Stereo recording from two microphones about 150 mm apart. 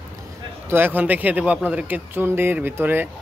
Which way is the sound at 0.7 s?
15° right (ahead or behind).